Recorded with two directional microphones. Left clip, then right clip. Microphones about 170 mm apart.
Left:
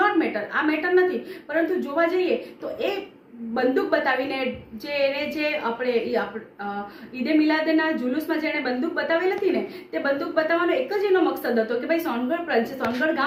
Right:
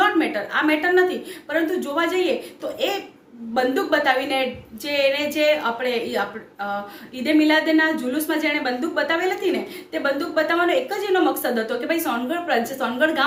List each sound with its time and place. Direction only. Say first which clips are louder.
0.0 s a woman's voice: right 2 dB; 15° right (ahead or behind)
3.5 s a woman's voice: right 2 dB; 15° right (ahead or behind)